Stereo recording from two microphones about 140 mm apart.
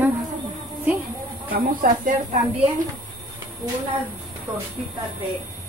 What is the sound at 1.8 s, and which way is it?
Speech, 90° right.